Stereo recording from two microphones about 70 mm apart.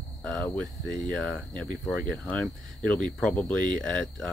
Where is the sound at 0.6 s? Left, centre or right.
Centre.